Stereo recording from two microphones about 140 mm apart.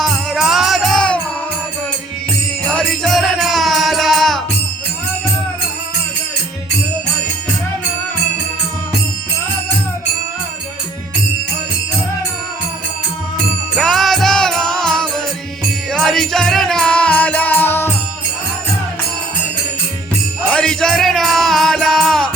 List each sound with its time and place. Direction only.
0.0 s music: centre (ahead or behind)
2.6 s music: 5° left (ahead or behind)
13.7 s music: centre (ahead or behind)
20.5 s music: 5° left (ahead or behind)